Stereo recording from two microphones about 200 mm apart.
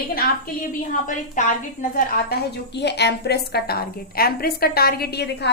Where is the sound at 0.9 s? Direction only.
40° left (ahead or behind).